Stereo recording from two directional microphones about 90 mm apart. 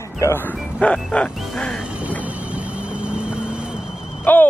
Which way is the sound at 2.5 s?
15° right (ahead or behind).